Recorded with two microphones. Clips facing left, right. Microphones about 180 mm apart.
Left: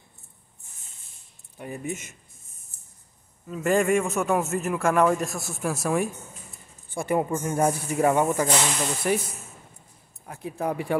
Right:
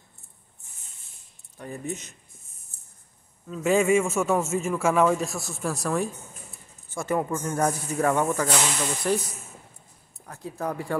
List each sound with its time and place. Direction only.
1.6 s speech: 10° left (ahead or behind)
3.4 s a man's voice: centre (ahead or behind)
10.2 s speech: 10° left (ahead or behind)